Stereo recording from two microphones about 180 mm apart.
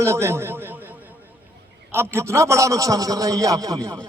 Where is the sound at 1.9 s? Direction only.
15° right (ahead or behind).